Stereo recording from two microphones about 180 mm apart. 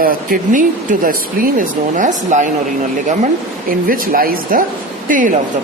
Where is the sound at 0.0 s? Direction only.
50° right (ahead or behind).